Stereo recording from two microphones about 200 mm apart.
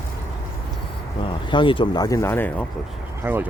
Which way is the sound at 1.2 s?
25° left (ahead or behind).